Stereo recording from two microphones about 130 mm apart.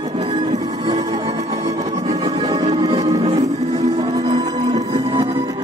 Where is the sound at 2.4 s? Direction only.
35° right (ahead or behind).